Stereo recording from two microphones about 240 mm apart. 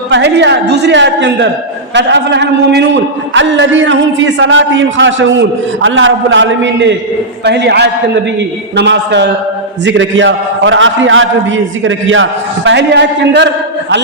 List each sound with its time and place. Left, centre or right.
0.1 s a man's voice: right